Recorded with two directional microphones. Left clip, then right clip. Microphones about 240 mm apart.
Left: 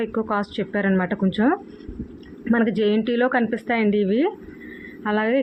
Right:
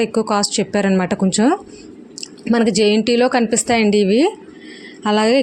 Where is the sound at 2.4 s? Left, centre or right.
Right.